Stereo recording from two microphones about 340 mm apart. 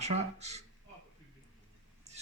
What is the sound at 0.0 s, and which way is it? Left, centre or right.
Speech, centre.